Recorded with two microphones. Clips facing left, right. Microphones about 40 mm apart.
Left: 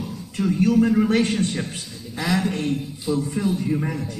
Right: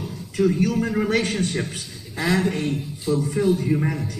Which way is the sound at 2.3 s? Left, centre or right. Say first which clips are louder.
Right 1 dB; right.